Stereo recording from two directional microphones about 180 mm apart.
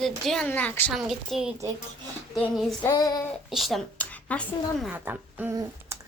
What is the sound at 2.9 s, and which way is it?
Child singing, 20° left (ahead or behind).